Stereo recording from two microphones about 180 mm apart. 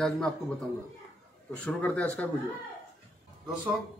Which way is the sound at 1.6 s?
5° left (ahead or behind).